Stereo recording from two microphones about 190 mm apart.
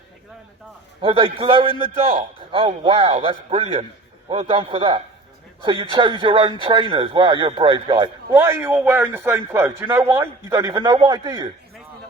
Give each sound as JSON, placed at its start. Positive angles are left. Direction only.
{"t": 1.0, "sound": "speech", "side_deg": -25}
{"t": 8.4, "sound": "a man's voice", "side_deg": -15}